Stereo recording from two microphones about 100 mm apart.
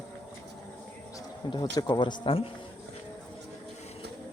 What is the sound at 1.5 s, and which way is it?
Speech, 50° left (ahead or behind).